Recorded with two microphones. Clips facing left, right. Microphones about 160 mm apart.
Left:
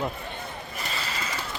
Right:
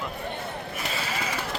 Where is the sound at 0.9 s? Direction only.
5° right (ahead or behind).